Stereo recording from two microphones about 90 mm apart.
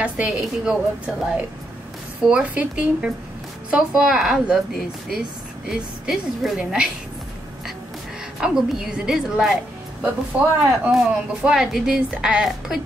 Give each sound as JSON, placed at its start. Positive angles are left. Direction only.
{"t": 0.0, "sound": "a woman's voice", "side_deg": -10}
{"t": 8.4, "sound": "a woman's voice", "side_deg": -5}
{"t": 10.6, "sound": "a woman's voice", "side_deg": -10}